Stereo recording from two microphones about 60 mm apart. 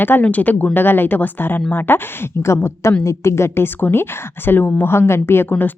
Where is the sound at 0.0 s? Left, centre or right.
Left.